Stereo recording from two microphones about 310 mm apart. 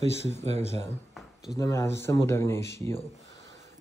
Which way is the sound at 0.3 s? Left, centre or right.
Right.